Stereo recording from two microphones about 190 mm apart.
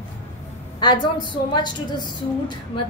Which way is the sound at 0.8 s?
25° left (ahead or behind).